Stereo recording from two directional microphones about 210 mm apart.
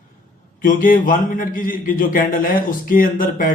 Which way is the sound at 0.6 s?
40° left (ahead or behind).